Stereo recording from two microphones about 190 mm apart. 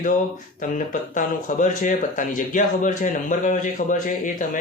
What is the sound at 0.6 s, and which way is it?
Speech, 45° left (ahead or behind).